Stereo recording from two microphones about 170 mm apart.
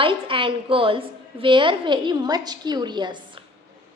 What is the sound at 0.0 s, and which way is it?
A woman's voice, 30° right (ahead or behind).